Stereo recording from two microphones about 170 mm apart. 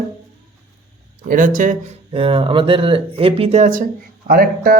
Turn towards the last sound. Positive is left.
turn(degrees=-60)  # may be behind; listen again after turning